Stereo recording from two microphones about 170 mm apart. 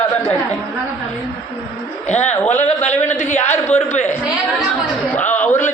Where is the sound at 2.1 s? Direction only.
40° left (ahead or behind).